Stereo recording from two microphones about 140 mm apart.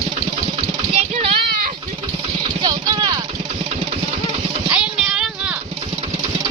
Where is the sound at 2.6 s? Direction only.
30° right (ahead or behind).